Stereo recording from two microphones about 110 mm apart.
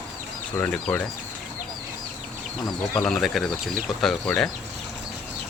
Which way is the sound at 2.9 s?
5° left (ahead or behind).